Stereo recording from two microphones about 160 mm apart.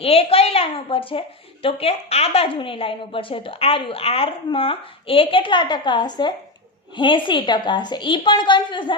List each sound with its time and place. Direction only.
0.0 s a woman's voice: 35° left (ahead or behind)